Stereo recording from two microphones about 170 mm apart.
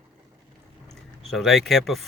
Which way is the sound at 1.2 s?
Centre (ahead or behind).